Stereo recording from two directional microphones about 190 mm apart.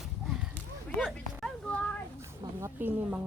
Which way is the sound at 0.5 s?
5° left (ahead or behind).